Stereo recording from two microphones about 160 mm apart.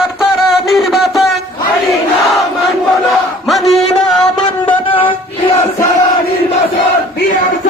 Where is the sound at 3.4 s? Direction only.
Centre (ahead or behind).